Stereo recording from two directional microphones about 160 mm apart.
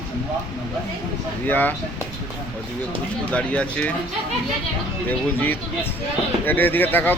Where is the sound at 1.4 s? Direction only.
10° left (ahead or behind).